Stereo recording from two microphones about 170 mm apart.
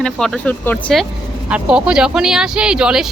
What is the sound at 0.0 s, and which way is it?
Speech, centre (ahead or behind).